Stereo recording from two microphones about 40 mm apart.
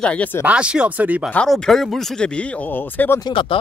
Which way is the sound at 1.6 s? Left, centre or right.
Centre.